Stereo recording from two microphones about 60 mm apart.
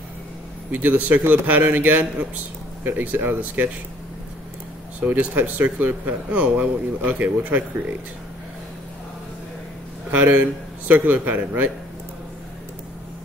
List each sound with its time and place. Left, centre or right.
0.7 s speech: right
5.0 s speech: right
10.1 s speech: right